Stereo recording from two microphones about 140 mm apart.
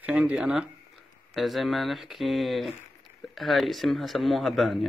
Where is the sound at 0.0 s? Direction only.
5° right (ahead or behind).